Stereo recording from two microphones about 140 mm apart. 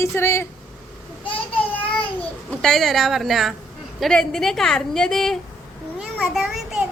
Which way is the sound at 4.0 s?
5° left (ahead or behind).